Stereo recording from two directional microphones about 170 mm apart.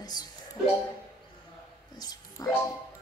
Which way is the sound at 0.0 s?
25° left (ahead or behind).